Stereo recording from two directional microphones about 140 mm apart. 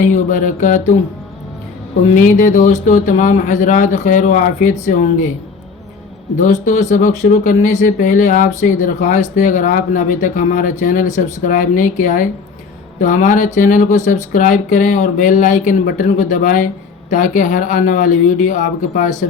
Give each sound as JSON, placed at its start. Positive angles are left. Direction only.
{"t": 0.0, "sound": "speech", "side_deg": 65}
{"t": 2.1, "sound": "speech", "side_deg": 65}
{"t": 6.3, "sound": "speech", "side_deg": 60}